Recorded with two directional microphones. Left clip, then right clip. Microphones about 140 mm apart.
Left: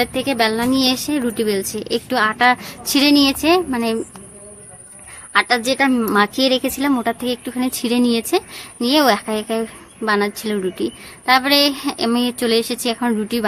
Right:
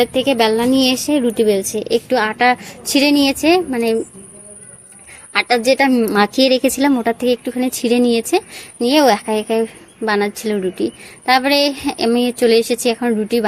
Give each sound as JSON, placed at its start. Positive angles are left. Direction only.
{"t": 0.0, "sound": "speech", "side_deg": -15}
{"t": 5.3, "sound": "speech", "side_deg": -15}